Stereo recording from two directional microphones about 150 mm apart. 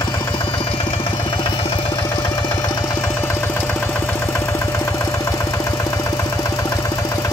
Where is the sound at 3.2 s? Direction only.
15° left (ahead or behind).